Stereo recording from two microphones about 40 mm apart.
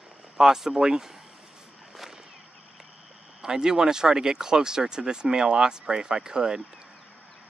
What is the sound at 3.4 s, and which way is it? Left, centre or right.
Speech, centre.